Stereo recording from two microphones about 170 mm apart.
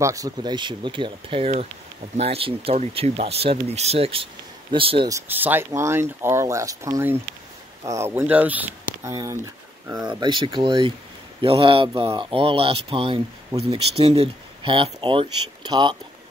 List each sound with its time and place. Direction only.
0.0 s speech: 20° right (ahead or behind)
5.1 s speech: 10° right (ahead or behind); by 16.0 s 25° right (ahead or behind)